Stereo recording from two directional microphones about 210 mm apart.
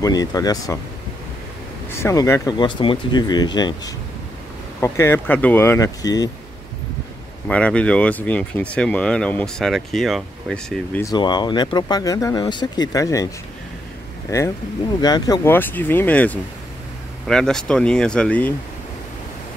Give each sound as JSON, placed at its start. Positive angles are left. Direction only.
{"t": 0.0, "sound": "speech", "side_deg": 20}
{"t": 1.9, "sound": "speech", "side_deg": 15}
{"t": 7.4, "sound": "speech", "side_deg": 5}
{"t": 14.3, "sound": "speech", "side_deg": 15}